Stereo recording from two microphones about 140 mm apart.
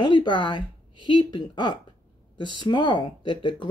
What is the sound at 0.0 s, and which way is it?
Speech, 35° left (ahead or behind).